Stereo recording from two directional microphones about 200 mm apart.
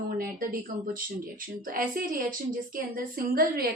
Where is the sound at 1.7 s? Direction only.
45° right (ahead or behind).